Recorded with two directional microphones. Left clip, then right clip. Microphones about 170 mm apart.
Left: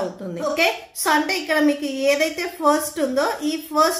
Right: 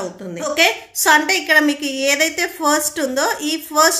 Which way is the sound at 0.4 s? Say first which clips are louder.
Right 4 dB; 30° right (ahead or behind).